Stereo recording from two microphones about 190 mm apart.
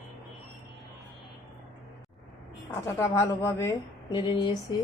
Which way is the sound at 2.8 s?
15° left (ahead or behind).